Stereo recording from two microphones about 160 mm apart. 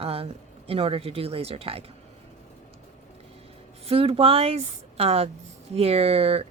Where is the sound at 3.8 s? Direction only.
35° right (ahead or behind).